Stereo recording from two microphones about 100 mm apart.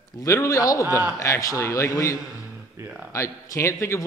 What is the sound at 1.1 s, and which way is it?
A man's voice, 30° left (ahead or behind).